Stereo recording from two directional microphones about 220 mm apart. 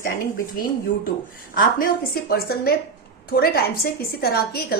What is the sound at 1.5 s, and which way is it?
A woman's voice, 40° left (ahead or behind).